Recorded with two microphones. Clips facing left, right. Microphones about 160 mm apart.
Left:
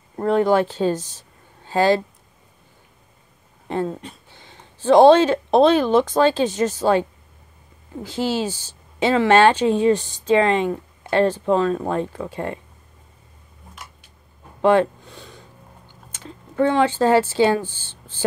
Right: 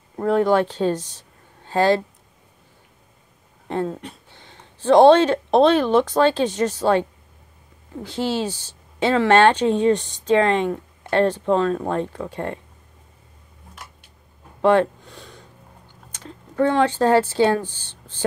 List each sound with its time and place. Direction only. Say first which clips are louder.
0.1 s speech: even; centre (ahead or behind)
3.6 s speech: even; centre (ahead or behind)
14.6 s a sound: even; centre (ahead or behind)
15.9 s speech: even; centre (ahead or behind)